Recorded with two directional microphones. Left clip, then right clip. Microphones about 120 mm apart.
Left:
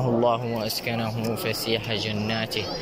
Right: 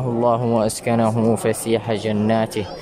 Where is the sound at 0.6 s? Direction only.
50° right (ahead or behind).